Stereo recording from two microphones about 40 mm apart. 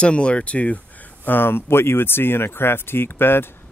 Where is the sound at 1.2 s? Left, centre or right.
Left.